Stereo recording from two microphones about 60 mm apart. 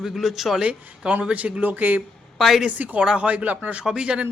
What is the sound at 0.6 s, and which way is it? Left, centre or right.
Speech, centre.